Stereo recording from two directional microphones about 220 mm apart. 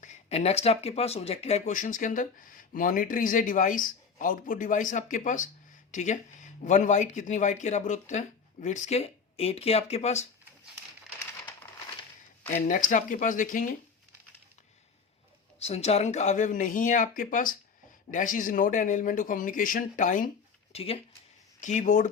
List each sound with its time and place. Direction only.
0.0 s speech: 30° left (ahead or behind)
12.6 s speech: 35° left (ahead or behind)
15.5 s speech: 30° left (ahead or behind)
20.7 s speech: 25° left (ahead or behind)